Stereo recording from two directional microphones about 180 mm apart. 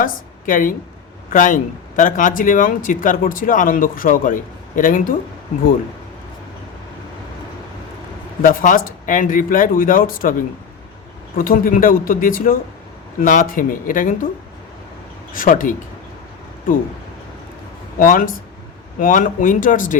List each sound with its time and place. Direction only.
0.0 s speech: 50° left (ahead or behind)
8.4 s speech: 50° left (ahead or behind)
11.3 s speech: 50° left (ahead or behind)
15.3 s speech: 45° left (ahead or behind)
18.0 s speech: 50° left (ahead or behind)